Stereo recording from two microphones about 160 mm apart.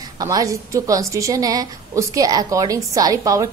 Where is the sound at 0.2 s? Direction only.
20° right (ahead or behind).